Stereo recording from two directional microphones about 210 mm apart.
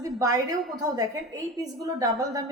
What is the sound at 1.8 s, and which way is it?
Speech, 15° right (ahead or behind).